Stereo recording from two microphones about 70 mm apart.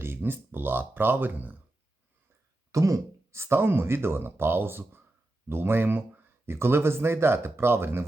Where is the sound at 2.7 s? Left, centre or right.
Right.